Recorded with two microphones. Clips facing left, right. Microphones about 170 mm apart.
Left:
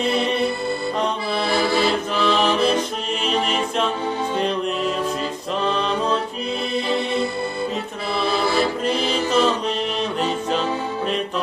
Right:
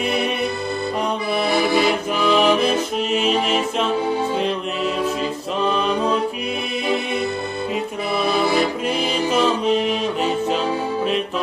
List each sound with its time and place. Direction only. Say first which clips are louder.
1.5 s music: right 2 dB; 15° right (ahead or behind)
8.4 s music: right 1 dB; 15° right (ahead or behind)